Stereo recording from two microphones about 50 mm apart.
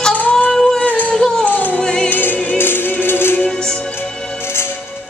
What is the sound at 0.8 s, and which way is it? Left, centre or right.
Music, left.